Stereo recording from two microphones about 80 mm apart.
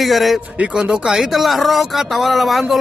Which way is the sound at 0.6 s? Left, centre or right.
Centre.